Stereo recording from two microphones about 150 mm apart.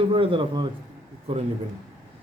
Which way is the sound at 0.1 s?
35° right (ahead or behind).